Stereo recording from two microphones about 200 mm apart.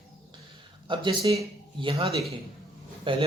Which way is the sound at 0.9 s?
25° right (ahead or behind).